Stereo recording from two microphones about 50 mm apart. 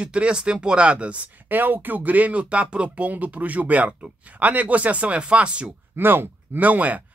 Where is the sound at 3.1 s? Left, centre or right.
Right.